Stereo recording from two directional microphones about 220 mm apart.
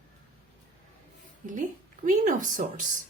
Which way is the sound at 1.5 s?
35° right (ahead or behind).